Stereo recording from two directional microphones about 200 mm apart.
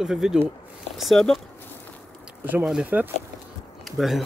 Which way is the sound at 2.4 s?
10° right (ahead or behind).